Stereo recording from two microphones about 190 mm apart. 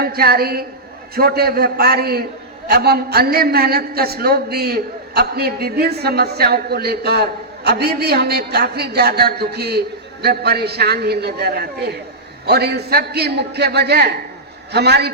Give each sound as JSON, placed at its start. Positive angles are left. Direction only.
{"t": 0.0, "sound": "a woman's voice", "side_deg": -55}